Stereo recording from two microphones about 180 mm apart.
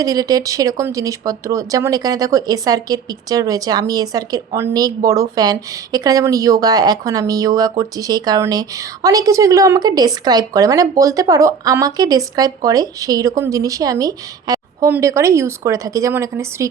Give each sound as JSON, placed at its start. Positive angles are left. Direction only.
{"t": 0.0, "sound": "a woman's voice", "side_deg": -20}